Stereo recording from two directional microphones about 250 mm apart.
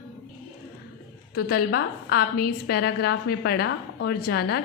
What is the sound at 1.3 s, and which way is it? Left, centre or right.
A woman's voice, left.